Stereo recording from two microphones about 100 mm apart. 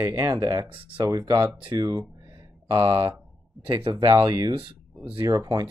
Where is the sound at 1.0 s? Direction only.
35° right (ahead or behind).